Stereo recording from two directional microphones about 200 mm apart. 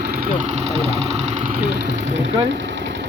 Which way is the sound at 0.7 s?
30° right (ahead or behind).